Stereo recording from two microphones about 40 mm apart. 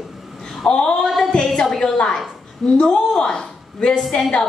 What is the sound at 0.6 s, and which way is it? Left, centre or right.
Speech, left.